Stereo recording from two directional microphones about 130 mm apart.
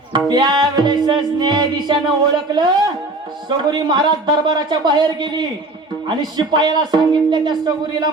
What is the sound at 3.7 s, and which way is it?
Music, 35° right (ahead or behind).